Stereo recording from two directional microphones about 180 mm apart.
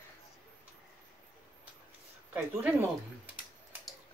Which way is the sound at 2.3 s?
10° right (ahead or behind).